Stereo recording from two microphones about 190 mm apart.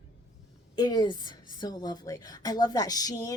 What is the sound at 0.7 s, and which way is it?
Speech, 20° left (ahead or behind).